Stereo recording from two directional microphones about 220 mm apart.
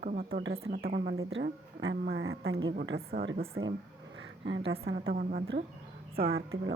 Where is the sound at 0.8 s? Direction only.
45° right (ahead or behind).